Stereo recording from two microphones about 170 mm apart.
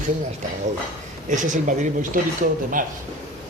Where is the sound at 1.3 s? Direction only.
50° right (ahead or behind).